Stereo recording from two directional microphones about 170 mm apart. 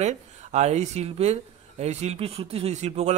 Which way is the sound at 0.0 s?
40° right (ahead or behind).